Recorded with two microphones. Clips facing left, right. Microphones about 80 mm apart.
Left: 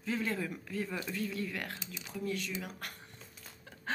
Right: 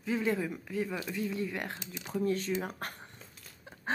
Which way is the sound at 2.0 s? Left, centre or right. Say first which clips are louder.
Right 7 dB; right.